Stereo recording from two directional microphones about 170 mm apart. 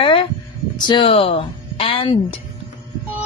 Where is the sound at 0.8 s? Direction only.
25° left (ahead or behind).